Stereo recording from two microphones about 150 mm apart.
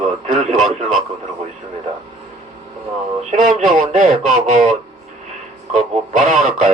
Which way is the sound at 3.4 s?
60° right (ahead or behind).